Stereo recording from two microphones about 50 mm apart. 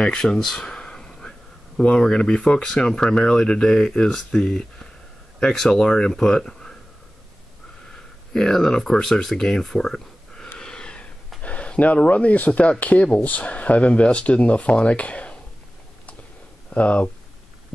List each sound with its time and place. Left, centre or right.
0.0 s speech: centre
0.6 s a sound: left
2.0 s speech: centre
8.3 s speech: centre
10.6 s a sound: centre
12.1 s speech: left
16.7 s speech: left